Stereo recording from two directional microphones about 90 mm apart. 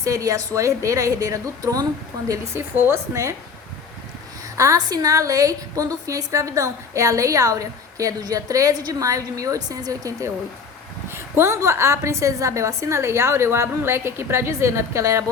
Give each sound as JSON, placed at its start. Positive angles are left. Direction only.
{"t": 0.0, "sound": "a woman's voice", "side_deg": -40}
{"t": 4.5, "sound": "a woman's voice", "side_deg": -40}